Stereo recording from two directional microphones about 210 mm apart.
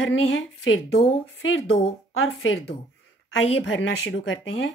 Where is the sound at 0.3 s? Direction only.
75° left (ahead or behind).